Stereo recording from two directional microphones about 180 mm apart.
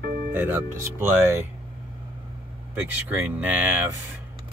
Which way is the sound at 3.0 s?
10° right (ahead or behind).